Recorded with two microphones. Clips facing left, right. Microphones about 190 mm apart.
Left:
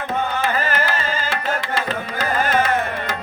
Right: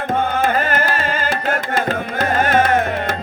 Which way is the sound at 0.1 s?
50° right (ahead or behind).